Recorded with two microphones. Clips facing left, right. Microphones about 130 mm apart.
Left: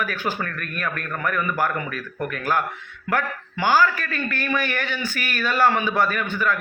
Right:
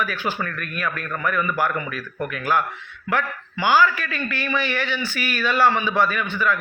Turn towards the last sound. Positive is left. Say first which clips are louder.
# right 1 dB
turn(degrees=45)  # may be behind; listen again after turning